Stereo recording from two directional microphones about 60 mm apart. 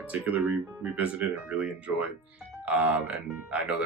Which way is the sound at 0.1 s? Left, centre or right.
Right.